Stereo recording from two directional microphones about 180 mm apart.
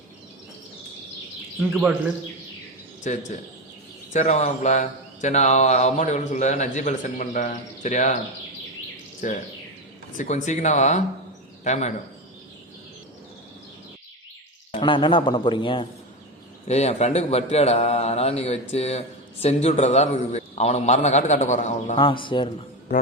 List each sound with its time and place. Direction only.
3.0 s speech: 45° left (ahead or behind)
9.2 s speech: 45° left (ahead or behind)
14.7 s a man's voice: 30° left (ahead or behind)
21.9 s a man's voice: 25° left (ahead or behind)